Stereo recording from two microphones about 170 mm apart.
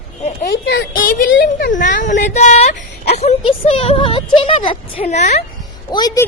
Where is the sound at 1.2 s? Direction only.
80° left; by 2.8 s 40° left (ahead or behind).